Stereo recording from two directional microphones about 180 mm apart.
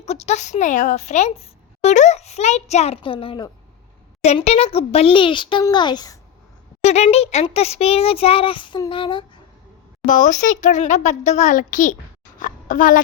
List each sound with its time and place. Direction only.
0.0 s a woman's voice: 40° left (ahead or behind)
6.8 s a woman's voice: 35° left (ahead or behind)
10.1 s a child's voice: 45° left (ahead or behind)